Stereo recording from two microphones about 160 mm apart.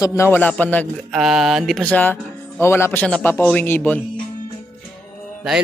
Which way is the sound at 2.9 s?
5° left (ahead or behind).